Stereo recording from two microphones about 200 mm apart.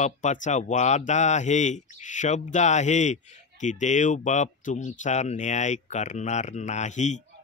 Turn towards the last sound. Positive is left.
turn(degrees=35)  # may be behind; listen again after turning